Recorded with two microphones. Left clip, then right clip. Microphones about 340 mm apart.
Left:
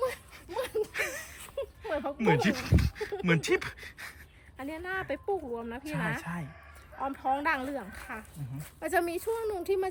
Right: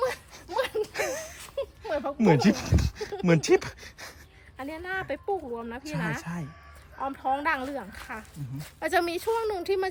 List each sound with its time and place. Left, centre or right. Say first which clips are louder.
0.0 s a sound: right 4 dB; centre
4.5 s speech: right 2 dB; centre
8.8 s a woman's voice: right 3 dB; centre